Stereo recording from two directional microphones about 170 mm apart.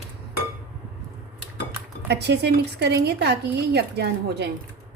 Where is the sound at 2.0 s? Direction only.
80° right.